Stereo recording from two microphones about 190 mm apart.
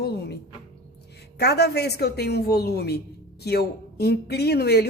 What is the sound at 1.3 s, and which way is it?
A woman's voice, 60° left (ahead or behind).